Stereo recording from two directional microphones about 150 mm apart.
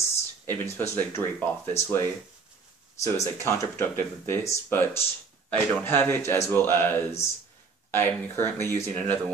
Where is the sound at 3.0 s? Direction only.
20° left (ahead or behind).